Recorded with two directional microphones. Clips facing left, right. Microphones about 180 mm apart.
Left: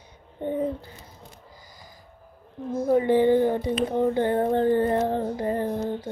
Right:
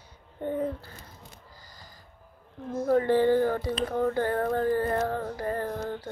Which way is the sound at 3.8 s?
20° left (ahead or behind).